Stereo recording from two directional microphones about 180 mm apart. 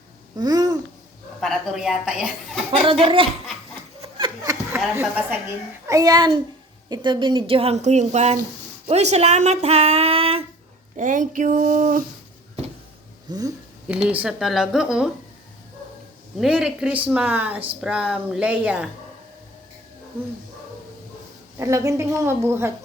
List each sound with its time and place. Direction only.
0.3 s babbling: 20° right (ahead or behind)
1.4 s speech: centre (ahead or behind)
2.8 s speech: 30° right (ahead or behind)
4.9 s a woman's voice: 10° right (ahead or behind); by 10.4 s 30° right (ahead or behind)
10.9 s speech: 45° right (ahead or behind)
13.3 s speech: 20° right (ahead or behind)
13.8 s speech: 5° right (ahead or behind)
16.4 s a woman's voice: 5° right (ahead or behind)
21.6 s a woman's voice: 15° right (ahead or behind)